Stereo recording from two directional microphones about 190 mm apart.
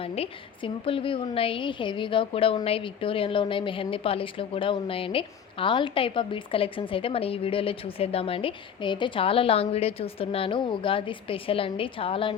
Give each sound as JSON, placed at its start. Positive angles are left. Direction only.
{"t": 0.0, "sound": "a woman's voice", "side_deg": 30}